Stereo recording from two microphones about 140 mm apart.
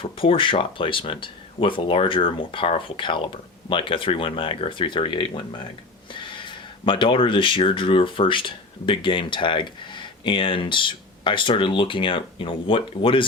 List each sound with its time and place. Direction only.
0.0 s speech: 40° left (ahead or behind)